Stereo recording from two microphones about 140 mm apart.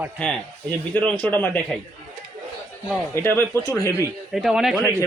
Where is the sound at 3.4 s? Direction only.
25° right (ahead or behind).